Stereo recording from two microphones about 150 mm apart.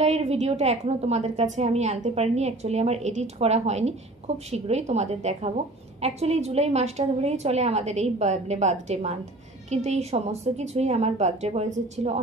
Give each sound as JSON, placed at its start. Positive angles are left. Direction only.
{"t": 0.0, "sound": "a woman's voice", "side_deg": -45}